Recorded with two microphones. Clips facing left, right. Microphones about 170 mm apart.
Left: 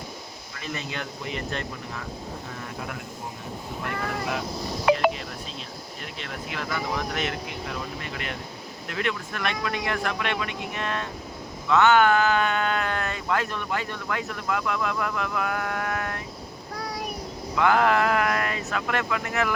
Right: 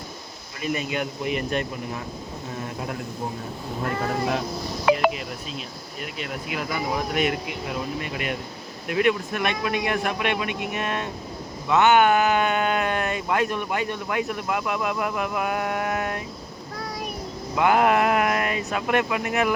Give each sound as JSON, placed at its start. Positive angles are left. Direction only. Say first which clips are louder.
{"t": 0.6, "sound": "speech", "louder": "right 7 dB", "side_deg": -15}
{"t": 2.6, "sound": "a sound", "louder": "right 4 dB", "side_deg": -25}
{"t": 3.8, "sound": "speech", "louder": "right 5 dB", "side_deg": -30}
{"t": 6.0, "sound": "speech", "louder": "right 5 dB", "side_deg": -10}
{"t": 17.5, "sound": "speech", "louder": "right 2 dB", "side_deg": -20}